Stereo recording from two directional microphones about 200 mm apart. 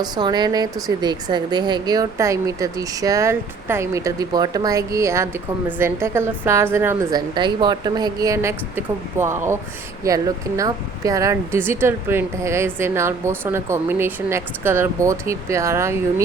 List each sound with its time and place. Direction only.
0.0 s a woman's voice: 20° right (ahead or behind)